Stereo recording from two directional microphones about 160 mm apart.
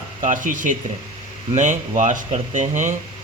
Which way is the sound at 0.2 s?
55° right (ahead or behind).